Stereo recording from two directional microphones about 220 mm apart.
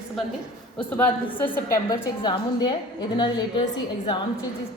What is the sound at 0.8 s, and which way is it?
A woman's voice, 10° left (ahead or behind).